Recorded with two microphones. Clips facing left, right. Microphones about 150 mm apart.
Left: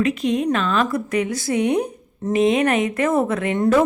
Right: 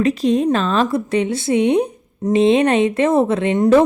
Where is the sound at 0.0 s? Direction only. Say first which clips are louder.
Right 4 dB; 35° right (ahead or behind).